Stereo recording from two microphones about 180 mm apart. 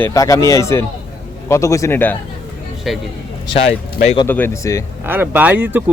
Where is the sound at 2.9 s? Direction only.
Centre (ahead or behind).